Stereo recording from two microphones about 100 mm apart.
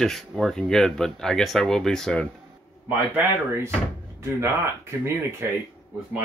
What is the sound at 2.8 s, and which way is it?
Speech, 20° right (ahead or behind).